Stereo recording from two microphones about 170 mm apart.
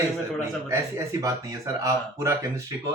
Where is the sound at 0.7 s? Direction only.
20° right (ahead or behind).